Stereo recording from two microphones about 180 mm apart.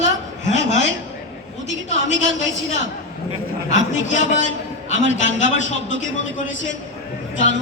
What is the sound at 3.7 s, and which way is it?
A man's voice, 45° left (ahead or behind).